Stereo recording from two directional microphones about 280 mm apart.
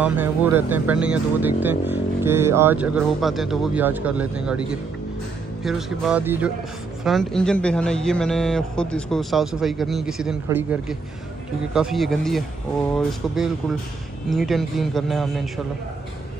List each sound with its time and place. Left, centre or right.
0.0 s speech: centre